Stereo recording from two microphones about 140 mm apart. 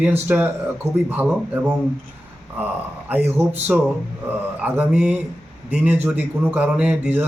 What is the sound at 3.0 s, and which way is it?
Speech, 15° right (ahead or behind).